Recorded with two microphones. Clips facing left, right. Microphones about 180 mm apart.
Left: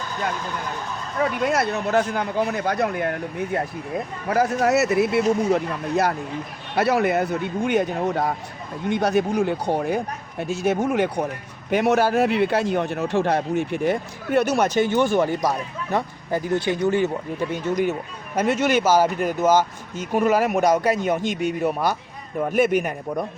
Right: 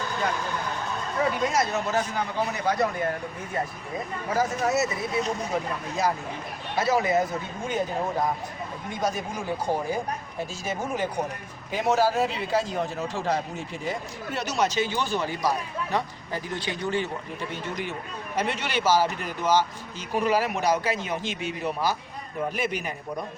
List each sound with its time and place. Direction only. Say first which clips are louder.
1.5 s speech: left 4 dB; 60° left (ahead or behind)